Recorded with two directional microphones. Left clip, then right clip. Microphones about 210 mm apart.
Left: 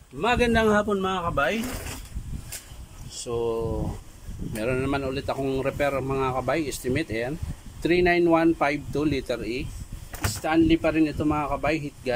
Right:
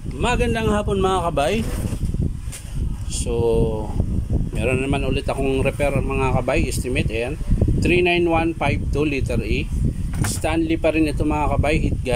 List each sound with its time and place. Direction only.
0.2 s a man's voice: centre (ahead or behind)
1.1 s speech: 20° right (ahead or behind)
3.3 s speech: 15° right (ahead or behind)